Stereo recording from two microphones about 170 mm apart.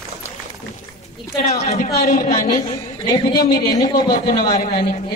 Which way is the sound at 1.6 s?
45° left (ahead or behind).